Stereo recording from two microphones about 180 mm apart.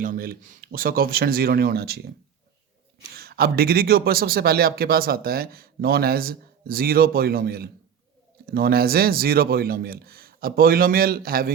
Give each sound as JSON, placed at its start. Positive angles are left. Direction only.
{"t": 0.0, "sound": "speech", "side_deg": -55}
{"t": 3.2, "sound": "speech", "side_deg": -60}